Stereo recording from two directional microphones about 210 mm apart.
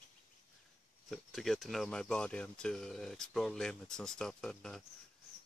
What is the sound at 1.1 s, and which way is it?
Speech, centre (ahead or behind).